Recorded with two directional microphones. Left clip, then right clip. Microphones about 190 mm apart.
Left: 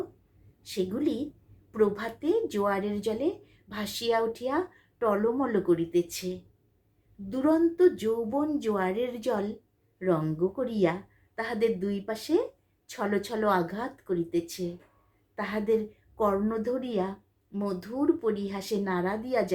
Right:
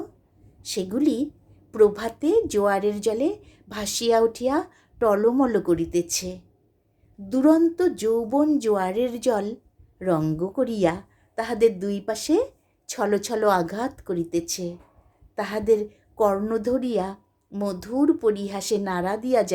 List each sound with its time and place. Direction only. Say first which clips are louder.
0.6 s a woman's voice: right 6 dB; 50° right (ahead or behind)